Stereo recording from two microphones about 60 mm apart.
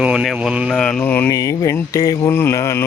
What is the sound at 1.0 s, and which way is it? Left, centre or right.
Mantra, left.